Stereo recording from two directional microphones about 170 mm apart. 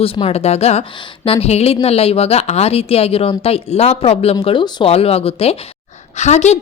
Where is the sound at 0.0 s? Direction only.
35° left (ahead or behind).